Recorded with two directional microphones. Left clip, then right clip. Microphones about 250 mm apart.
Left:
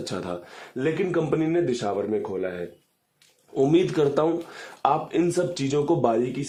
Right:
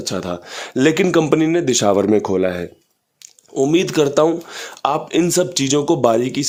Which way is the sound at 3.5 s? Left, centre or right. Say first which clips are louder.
Right 5 dB; right.